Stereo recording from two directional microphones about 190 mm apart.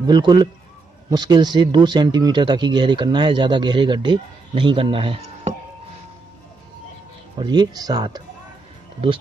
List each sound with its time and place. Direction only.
0.0 s speech: 20° right (ahead or behind)
7.3 s speech: 25° right (ahead or behind)